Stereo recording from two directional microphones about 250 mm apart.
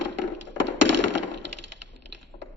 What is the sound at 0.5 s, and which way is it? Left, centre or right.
Tap, right.